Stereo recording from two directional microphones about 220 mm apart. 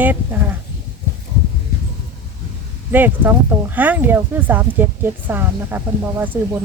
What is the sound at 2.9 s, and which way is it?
Speech, 10° right (ahead or behind).